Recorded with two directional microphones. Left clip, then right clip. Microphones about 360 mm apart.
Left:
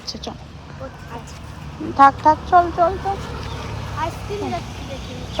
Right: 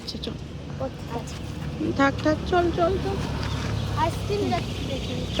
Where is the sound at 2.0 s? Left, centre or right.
Centre.